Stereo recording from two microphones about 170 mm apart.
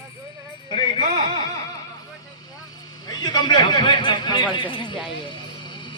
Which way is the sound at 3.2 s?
25° left (ahead or behind).